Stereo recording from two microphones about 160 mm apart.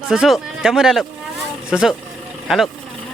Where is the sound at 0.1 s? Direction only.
5° right (ahead or behind).